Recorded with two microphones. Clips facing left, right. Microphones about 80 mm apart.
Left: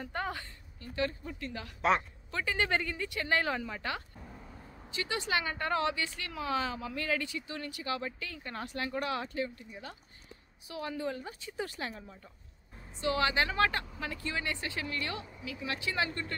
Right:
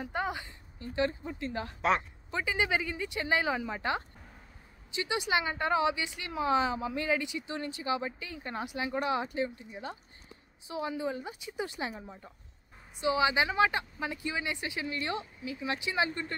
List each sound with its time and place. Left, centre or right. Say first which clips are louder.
0.0 s a woman's voice: right 3 dB; centre
1.8 s a woman's voice: even; centre
2.3 s speech: right 1 dB; centre
10.7 s speech: right 3 dB; centre